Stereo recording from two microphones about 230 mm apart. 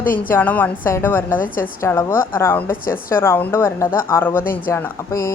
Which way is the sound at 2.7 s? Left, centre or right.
Left.